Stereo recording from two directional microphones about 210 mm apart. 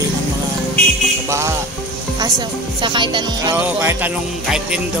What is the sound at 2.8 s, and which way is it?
Speech, 20° right (ahead or behind).